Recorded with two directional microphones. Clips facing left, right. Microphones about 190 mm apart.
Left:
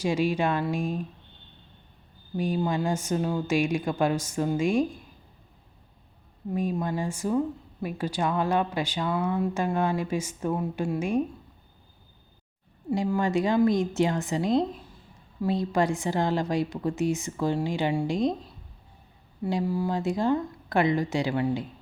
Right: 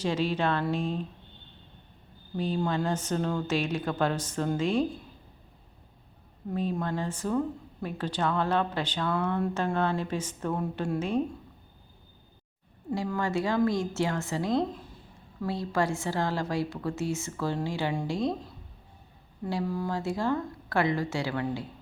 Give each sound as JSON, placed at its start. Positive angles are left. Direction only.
{"t": 0.0, "sound": "speech", "side_deg": 10}
{"t": 2.3, "sound": "speech", "side_deg": 10}
{"t": 6.5, "sound": "speech", "side_deg": 10}
{"t": 12.9, "sound": "speech", "side_deg": 20}
{"t": 19.4, "sound": "speech", "side_deg": 15}